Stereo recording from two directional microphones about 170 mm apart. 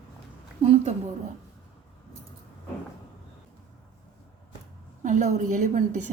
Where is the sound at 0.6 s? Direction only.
40° right (ahead or behind).